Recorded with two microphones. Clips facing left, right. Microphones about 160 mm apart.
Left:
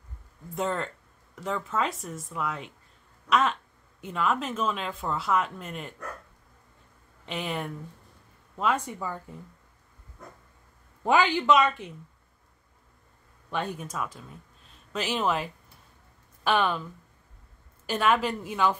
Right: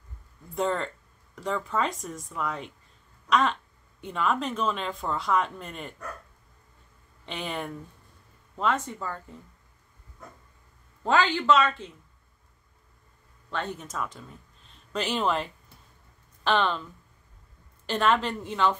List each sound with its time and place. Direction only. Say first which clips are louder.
0.6 s speech: right 2 dB; centre (ahead or behind)
3.3 s a sound: even; 5° left (ahead or behind)
4.0 s speech: even; centre (ahead or behind)
7.2 s a woman's voice: left 1 dB; centre (ahead or behind)
11.1 s a woman's voice: left 1 dB; 15° left (ahead or behind)
13.7 s a woman's voice: even; 10° left (ahead or behind)
17.8 s a woman's voice: even; 10° left (ahead or behind)